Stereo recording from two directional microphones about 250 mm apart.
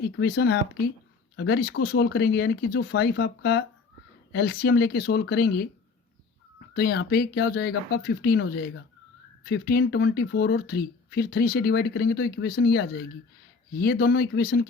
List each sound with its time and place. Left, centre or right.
0.0 s speech: left
6.7 s speech: left